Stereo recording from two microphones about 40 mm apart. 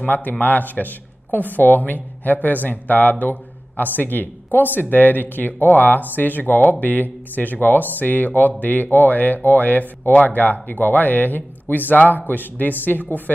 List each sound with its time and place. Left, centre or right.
0.0 s speech: left